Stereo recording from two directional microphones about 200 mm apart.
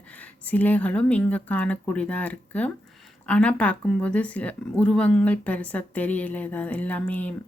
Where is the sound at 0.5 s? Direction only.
10° left (ahead or behind).